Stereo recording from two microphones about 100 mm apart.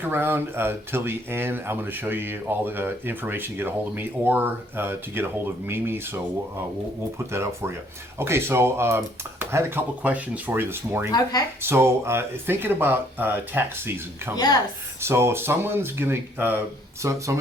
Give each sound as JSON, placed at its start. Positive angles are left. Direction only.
{"t": 0.0, "sound": "speech", "side_deg": -20}
{"t": 7.3, "sound": "speech", "side_deg": -25}
{"t": 11.1, "sound": "speech", "side_deg": 40}
{"t": 11.6, "sound": "speech", "side_deg": -25}
{"t": 14.3, "sound": "speech", "side_deg": 40}
{"t": 15.0, "sound": "speech", "side_deg": -25}
{"t": 17.0, "sound": "speech", "side_deg": -30}